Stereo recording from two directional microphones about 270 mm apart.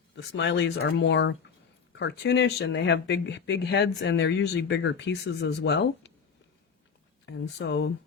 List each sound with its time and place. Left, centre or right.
0.2 s speech: left
7.3 s speech: left